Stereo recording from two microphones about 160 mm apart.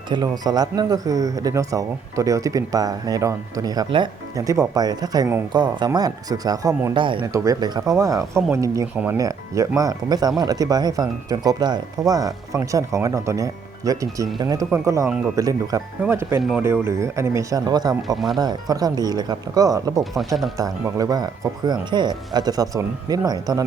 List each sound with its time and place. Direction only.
0.1 s speech: 25° right (ahead or behind)
7.0 s speech: 30° right (ahead or behind); by 16.4 s 15° right (ahead or behind)
16.4 s speech: 5° right (ahead or behind)
16.8 s speech: 15° right (ahead or behind)
20.1 s speech: centre (ahead or behind)
20.6 s speech: 20° right (ahead or behind)